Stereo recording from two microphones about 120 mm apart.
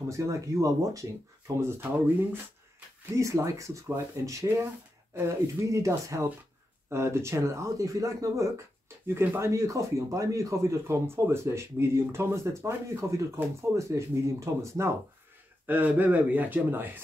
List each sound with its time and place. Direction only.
0.1 s speech: 25° right (ahead or behind)